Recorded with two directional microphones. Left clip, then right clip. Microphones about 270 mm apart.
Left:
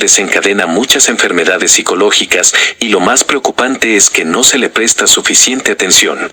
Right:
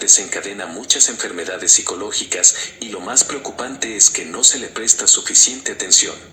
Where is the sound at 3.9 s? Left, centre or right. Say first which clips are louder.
Left 3 dB; left.